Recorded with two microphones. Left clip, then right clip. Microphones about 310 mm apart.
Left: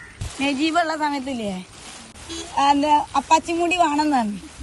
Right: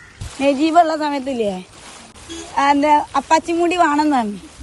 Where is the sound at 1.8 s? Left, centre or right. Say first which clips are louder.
Right 1 dB; centre.